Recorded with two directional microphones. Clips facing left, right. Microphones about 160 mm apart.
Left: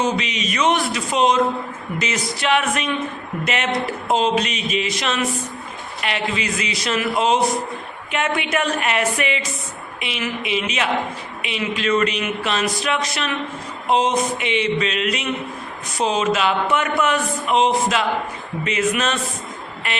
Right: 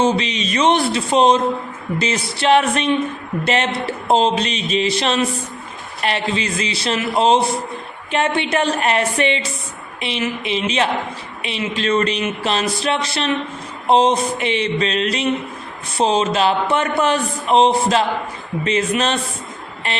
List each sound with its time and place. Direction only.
0.0 s speech: 30° right (ahead or behind)